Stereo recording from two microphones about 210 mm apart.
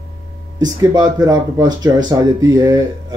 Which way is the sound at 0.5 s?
15° right (ahead or behind).